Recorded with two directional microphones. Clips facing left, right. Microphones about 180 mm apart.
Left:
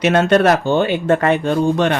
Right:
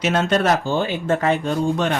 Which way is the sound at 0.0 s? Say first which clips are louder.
Left 6 dB; 65° left (ahead or behind).